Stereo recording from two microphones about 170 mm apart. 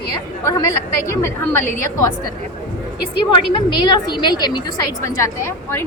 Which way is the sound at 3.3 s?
30° left (ahead or behind).